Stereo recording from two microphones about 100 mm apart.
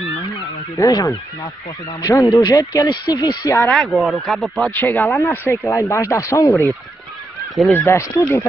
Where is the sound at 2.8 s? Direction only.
45° left (ahead or behind).